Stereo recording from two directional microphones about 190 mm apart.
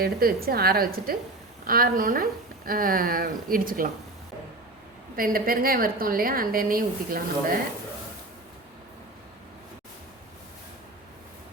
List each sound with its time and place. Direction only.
0.0 s a woman's voice: 50° right (ahead or behind)
5.1 s a woman's voice: 50° right (ahead or behind)